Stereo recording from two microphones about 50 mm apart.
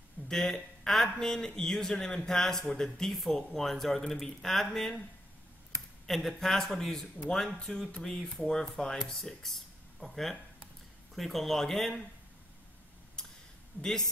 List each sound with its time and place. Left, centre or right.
0.3 s speech: centre
6.0 s speech: centre
13.2 s a sound: centre